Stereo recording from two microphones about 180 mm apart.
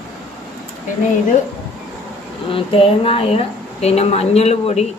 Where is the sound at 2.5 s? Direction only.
30° left (ahead or behind).